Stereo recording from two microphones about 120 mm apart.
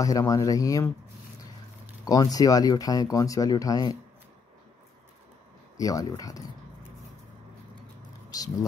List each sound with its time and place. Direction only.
0.0 s speech: 30° left (ahead or behind)
2.0 s speech: 30° left (ahead or behind)
5.8 s speech: 30° left (ahead or behind)
8.3 s speech: 30° left (ahead or behind)